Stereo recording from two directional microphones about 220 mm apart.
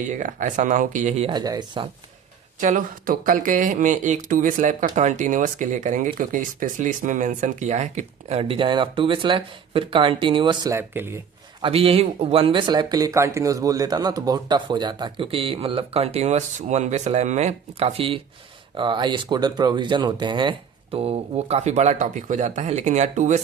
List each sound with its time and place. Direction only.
0.0 s speech: 35° right (ahead or behind); by 1.9 s 20° right (ahead or behind)
2.6 s speech: 35° right (ahead or behind); by 11.2 s 10° right (ahead or behind)
11.6 s speech: 25° right (ahead or behind)